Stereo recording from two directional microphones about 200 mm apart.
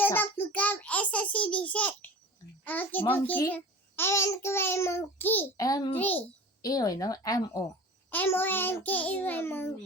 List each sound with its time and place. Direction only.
0.0 s a child's voice: 10° left (ahead or behind)
6.0 s a child's voice: 10° left (ahead or behind)